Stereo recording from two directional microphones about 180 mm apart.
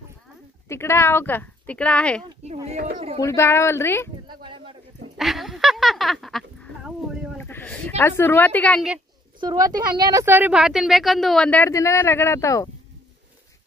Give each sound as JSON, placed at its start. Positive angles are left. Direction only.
{"t": 0.7, "sound": "speech", "side_deg": 15}
{"t": 2.4, "sound": "speech", "side_deg": -35}
{"t": 3.2, "sound": "speech", "side_deg": 15}
{"t": 4.3, "sound": "a sound", "side_deg": -25}
{"t": 5.1, "sound": "speech", "side_deg": 0}
{"t": 9.4, "sound": "speech", "side_deg": -25}